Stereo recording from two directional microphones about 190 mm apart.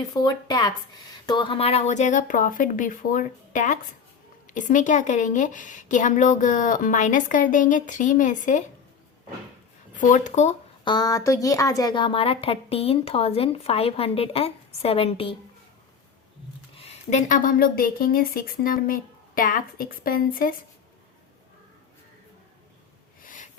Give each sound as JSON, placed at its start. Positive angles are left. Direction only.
{"t": 0.1, "sound": "a woman's voice", "side_deg": 20}
{"t": 10.0, "sound": "a woman's voice", "side_deg": 40}
{"t": 10.8, "sound": "a woman's voice", "side_deg": 20}
{"t": 16.7, "sound": "speech", "side_deg": 35}
{"t": 23.2, "sound": "snort", "side_deg": 45}